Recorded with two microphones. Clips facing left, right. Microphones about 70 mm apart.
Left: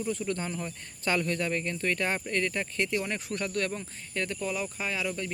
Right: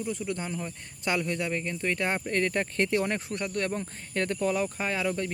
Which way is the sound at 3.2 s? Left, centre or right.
Right.